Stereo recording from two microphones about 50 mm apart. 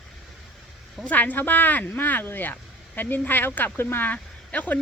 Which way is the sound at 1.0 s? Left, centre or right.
Left.